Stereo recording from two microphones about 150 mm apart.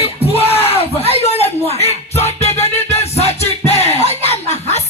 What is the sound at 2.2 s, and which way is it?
Music, 45° left (ahead or behind).